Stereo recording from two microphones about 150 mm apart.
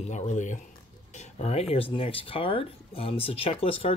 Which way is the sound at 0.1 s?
50° left (ahead or behind).